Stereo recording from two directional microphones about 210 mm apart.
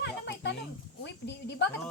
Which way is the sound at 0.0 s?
55° left (ahead or behind).